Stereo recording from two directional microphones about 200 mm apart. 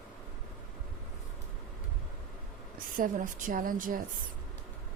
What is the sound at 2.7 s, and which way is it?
A woman's voice, 40° right (ahead or behind).